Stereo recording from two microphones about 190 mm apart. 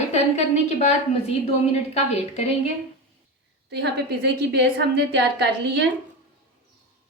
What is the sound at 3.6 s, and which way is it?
A woman's voice, 60° right (ahead or behind).